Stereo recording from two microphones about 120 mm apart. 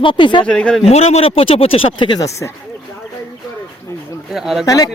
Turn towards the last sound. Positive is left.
turn(degrees=30)  # may be behind; listen again after turning